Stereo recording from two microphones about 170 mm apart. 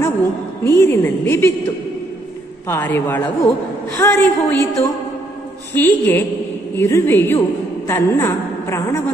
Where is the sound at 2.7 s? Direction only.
10° left (ahead or behind).